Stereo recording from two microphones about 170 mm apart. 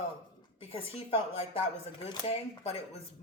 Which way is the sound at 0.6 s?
35° left (ahead or behind).